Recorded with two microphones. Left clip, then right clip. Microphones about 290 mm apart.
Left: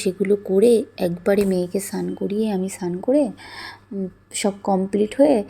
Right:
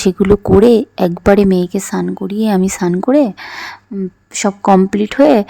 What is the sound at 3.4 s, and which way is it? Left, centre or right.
Speech, right.